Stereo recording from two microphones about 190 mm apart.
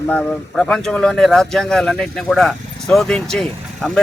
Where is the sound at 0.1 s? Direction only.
5° left (ahead or behind).